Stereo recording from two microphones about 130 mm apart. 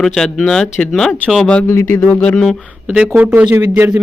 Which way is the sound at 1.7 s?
20° left (ahead or behind).